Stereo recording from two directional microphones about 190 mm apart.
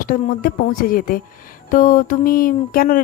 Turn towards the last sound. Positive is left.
turn(degrees=50)  # may be behind; listen again after turning